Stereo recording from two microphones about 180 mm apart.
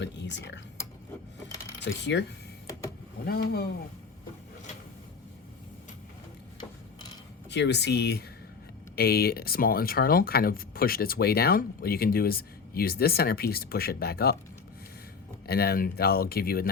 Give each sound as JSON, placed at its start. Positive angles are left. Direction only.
{"t": 0.0, "sound": "speech", "side_deg": 75}
{"t": 1.8, "sound": "speech", "side_deg": 75}
{"t": 3.2, "sound": "speech", "side_deg": 60}
{"t": 7.5, "sound": "speech", "side_deg": 70}
{"t": 15.4, "sound": "speech", "side_deg": 60}